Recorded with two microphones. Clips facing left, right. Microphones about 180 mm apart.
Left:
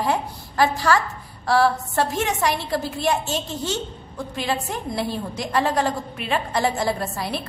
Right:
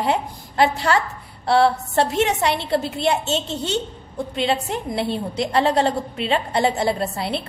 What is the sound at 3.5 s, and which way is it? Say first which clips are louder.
Speech: right 2 dB; 70° right (ahead or behind).